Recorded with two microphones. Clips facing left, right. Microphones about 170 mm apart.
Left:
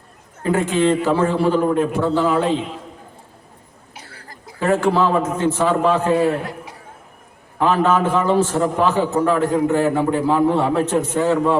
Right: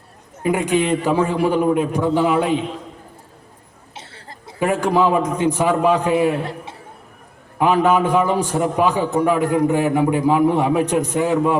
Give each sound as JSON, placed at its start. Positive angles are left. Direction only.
{"t": 0.4, "sound": "a man's voice", "side_deg": -15}
{"t": 3.9, "sound": "a sound", "side_deg": -25}
{"t": 4.6, "sound": "a man's voice", "side_deg": -15}
{"t": 7.6, "sound": "a man's voice", "side_deg": -15}